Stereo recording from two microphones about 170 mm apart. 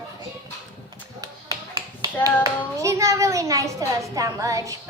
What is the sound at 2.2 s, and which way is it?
A child's voice, 20° right (ahead or behind).